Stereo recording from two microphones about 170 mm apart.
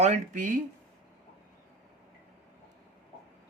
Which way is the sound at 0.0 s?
45° right (ahead or behind).